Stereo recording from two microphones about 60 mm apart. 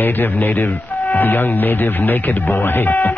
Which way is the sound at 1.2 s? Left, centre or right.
Left.